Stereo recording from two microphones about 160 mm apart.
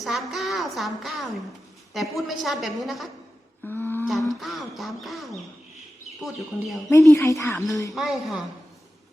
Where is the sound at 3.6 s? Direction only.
15° left (ahead or behind).